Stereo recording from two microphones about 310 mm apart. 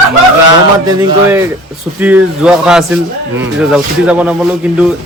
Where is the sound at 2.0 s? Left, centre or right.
Centre.